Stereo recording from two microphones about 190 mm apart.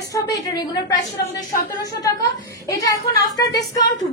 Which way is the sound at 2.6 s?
15° left (ahead or behind).